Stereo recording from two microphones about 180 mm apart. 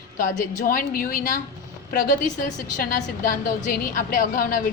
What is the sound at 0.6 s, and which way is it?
A woman's voice, 50° left (ahead or behind).